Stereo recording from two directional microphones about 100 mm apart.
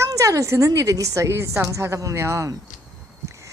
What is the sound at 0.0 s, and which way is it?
A woman's voice, 35° right (ahead or behind).